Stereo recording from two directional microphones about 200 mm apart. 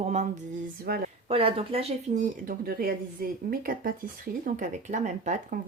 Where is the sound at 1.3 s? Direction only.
30° right (ahead or behind).